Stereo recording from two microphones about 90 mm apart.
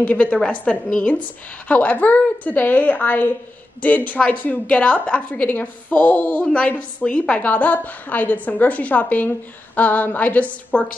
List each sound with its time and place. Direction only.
0.0 s a woman's voice: 15° left (ahead or behind)